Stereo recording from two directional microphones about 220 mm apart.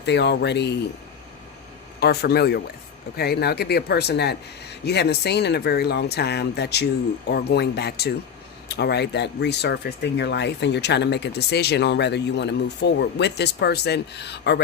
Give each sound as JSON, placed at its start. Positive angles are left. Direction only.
{"t": 0.0, "sound": "speech", "side_deg": 50}
{"t": 2.0, "sound": "speech", "side_deg": 45}